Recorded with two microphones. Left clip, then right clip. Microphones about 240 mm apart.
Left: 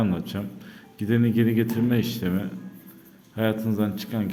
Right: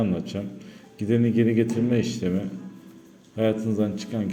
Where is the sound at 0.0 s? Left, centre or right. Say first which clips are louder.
Right 1 dB; centre.